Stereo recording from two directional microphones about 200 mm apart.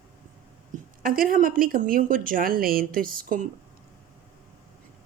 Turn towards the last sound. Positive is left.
turn(degrees=-45)  # may be behind; listen again after turning